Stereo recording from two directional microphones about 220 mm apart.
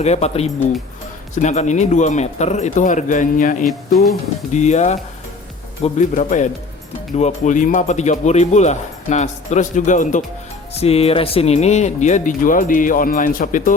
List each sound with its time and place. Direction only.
0.0 s speech: 30° left (ahead or behind)
3.7 s speech: centre (ahead or behind)
4.5 s speech: 30° left (ahead or behind)